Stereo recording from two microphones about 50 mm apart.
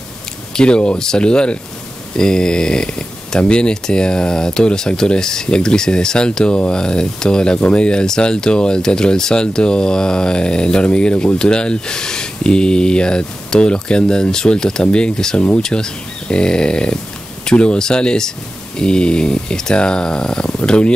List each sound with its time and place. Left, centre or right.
0.6 s speech: centre